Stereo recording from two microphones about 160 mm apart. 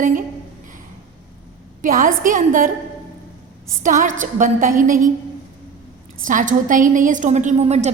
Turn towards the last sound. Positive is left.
turn(degrees=-45)  # may be behind; listen again after turning